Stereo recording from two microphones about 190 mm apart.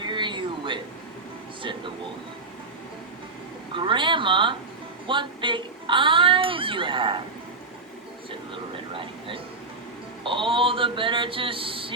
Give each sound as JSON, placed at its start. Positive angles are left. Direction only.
{"t": 0.0, "sound": "a sound", "side_deg": -25}
{"t": 3.8, "sound": "speech", "side_deg": -25}
{"t": 8.9, "sound": "speech", "side_deg": -25}